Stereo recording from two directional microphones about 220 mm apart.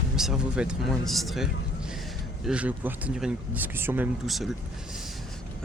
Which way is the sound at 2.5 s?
5° right (ahead or behind).